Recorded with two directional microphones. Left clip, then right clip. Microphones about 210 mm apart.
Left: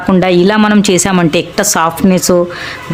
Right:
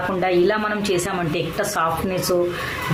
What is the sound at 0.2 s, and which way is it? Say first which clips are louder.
A woman's voice: left 9 dB; 55° left (ahead or behind).